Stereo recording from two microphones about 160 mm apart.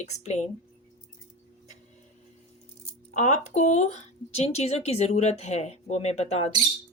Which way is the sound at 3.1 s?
45° left (ahead or behind).